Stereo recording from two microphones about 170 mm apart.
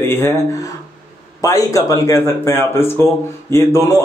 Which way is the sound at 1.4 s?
20° left (ahead or behind).